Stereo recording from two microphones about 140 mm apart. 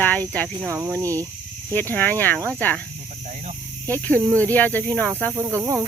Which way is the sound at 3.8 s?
15° left (ahead or behind).